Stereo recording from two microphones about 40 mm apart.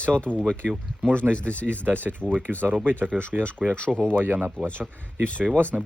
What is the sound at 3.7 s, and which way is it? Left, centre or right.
Speech, left.